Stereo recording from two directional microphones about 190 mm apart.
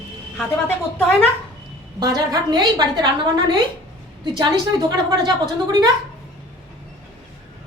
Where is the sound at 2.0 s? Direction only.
20° right (ahead or behind).